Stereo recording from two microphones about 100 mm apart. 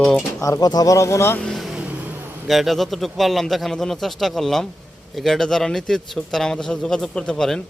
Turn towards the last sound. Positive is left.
turn(degrees=5)  # may be behind; listen again after turning